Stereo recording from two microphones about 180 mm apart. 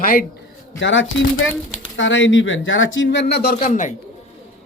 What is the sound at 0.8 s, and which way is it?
Speech, 90° left.